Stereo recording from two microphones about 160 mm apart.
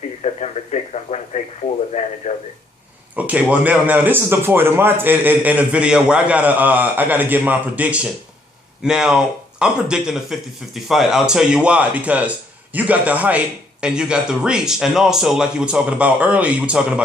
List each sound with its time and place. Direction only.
0.2 s speech: 45° left (ahead or behind)
3.2 s a man's voice: 10° right (ahead or behind)